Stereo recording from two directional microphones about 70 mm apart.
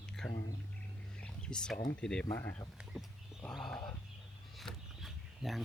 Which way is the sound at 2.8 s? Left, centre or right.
Centre.